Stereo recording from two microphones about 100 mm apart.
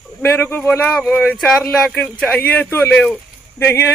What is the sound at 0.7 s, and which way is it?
Speech, 5° left (ahead or behind).